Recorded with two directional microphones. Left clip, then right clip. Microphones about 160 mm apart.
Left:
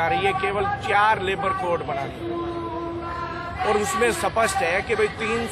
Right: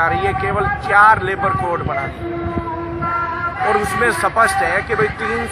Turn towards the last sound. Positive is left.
turn(degrees=10)  # may be behind; listen again after turning